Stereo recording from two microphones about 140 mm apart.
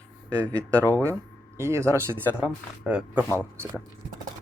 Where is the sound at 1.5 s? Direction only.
20° right (ahead or behind).